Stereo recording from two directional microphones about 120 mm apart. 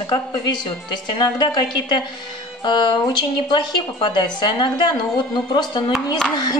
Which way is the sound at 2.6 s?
40° left (ahead or behind).